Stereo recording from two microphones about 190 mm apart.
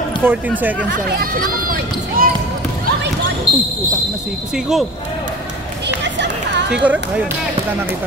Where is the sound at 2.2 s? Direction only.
50° right (ahead or behind).